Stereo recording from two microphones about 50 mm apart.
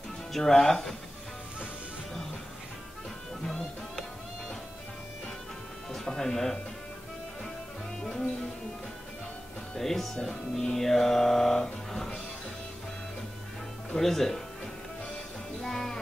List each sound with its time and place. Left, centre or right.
0.3 s music: centre
3.4 s music: centre
5.9 s speech: centre
8.0 s music: centre
9.8 s speech: centre
10.1 s music: centre
13.9 s music: centre
15.6 s music: centre